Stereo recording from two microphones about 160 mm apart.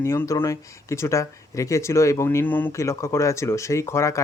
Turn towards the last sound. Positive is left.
turn(degrees=20)  # may be behind; listen again after turning